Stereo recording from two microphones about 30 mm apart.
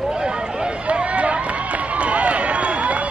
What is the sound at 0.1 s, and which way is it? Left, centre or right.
Run, right.